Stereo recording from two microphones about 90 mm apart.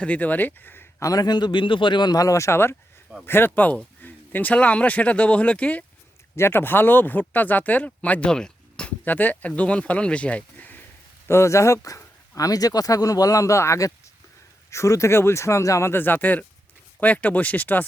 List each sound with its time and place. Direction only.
0.0 s speech: 15° left (ahead or behind)
1.0 s a man's voice: 45° left (ahead or behind); by 5.8 s 15° left (ahead or behind)
6.3 s speech: 25° left (ahead or behind)
11.3 s speech: 30° left (ahead or behind)